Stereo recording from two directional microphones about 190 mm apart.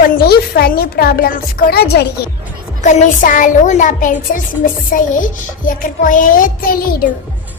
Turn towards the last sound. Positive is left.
turn(degrees=50)  # may be behind; listen again after turning